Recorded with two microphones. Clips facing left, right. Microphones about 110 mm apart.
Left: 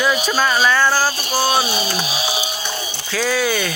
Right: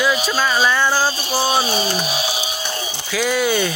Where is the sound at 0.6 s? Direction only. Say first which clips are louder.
Left 1 dB; 15° right (ahead or behind).